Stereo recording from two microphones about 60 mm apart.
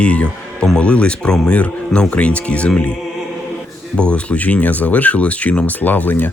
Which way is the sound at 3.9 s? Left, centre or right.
Centre.